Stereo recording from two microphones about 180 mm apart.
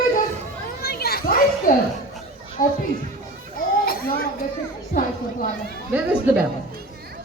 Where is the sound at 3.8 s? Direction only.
55° left (ahead or behind).